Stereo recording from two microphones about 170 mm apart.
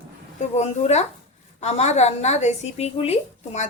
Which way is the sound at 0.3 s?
40° left (ahead or behind).